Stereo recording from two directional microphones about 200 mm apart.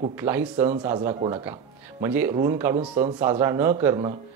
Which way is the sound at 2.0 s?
10° right (ahead or behind).